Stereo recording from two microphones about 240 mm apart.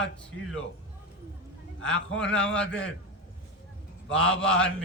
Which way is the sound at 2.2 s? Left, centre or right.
Centre.